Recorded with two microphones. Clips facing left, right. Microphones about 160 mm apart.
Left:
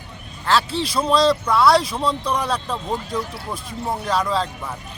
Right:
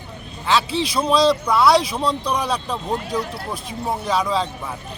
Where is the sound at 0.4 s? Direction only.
Centre (ahead or behind).